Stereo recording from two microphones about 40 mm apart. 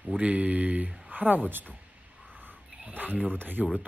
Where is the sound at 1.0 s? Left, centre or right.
Right.